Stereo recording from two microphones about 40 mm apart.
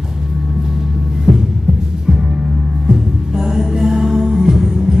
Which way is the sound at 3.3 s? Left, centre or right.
Centre.